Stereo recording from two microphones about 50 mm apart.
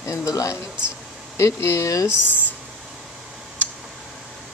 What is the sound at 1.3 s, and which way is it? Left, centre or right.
Speech, left.